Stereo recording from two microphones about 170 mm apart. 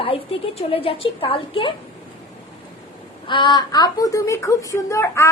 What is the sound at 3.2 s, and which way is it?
A woman's voice, 25° left (ahead or behind).